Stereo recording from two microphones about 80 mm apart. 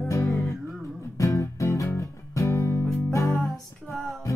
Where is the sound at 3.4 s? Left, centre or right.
Centre.